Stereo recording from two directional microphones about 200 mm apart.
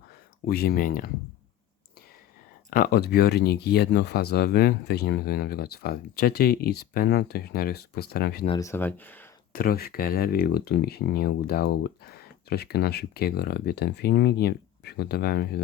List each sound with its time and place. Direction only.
0.4 s speech: 50° left (ahead or behind)
2.6 s speech: 45° left (ahead or behind)
8.4 s speech: 15° left (ahead or behind)
9.5 s speech: 45° left (ahead or behind)